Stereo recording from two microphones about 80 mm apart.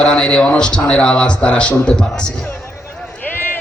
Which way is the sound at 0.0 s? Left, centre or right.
Centre.